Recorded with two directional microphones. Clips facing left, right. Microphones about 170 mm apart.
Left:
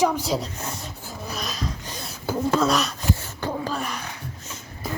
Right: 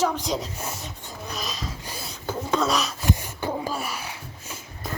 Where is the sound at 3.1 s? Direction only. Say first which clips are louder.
Even; 10° right (ahead or behind).